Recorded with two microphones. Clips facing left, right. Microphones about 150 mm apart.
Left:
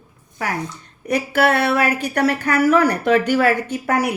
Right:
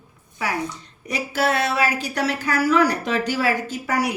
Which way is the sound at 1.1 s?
60° left (ahead or behind).